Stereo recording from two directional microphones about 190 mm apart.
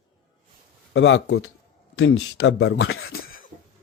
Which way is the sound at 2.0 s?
90° left.